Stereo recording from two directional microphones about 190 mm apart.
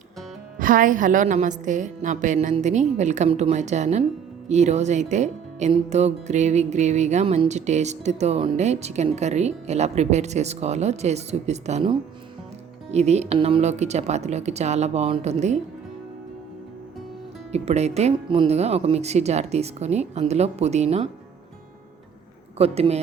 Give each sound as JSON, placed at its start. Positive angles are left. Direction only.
{"t": 0.6, "sound": "speech", "side_deg": -45}
{"t": 17.5, "sound": "speech", "side_deg": -35}
{"t": 22.5, "sound": "speech", "side_deg": -30}